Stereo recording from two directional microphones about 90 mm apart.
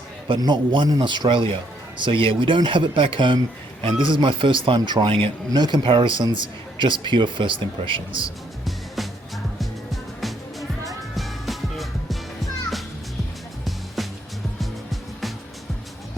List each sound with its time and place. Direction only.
0.3 s speech: 55° right (ahead or behind); by 5.3 s 80° right
5.5 s speech: 50° right (ahead or behind); by 8.3 s 70° right (ahead or behind)
8.6 s music: centre (ahead or behind)
13.7 s music: centre (ahead or behind)